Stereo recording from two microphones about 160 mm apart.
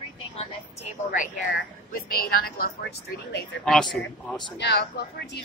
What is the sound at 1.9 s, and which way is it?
Speech, 65° left (ahead or behind).